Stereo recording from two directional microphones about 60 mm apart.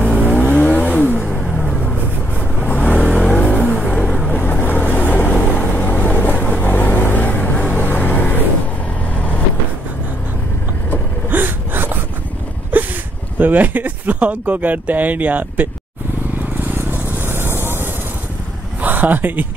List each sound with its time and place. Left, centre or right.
0.0 s vehicle: left
1.2 s vehicle: centre
2.4 s vehicle: left
3.1 s vehicle: centre
3.4 s vehicle: left
4.3 s boat: left
9.1 s vehicle: left
11.2 s gasp: right
12.7 s a sound: right
13.4 s speech: right
16.5 s vehicle: right
18.8 s a sound: right